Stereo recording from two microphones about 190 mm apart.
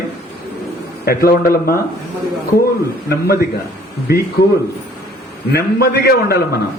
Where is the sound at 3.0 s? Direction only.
55° left (ahead or behind).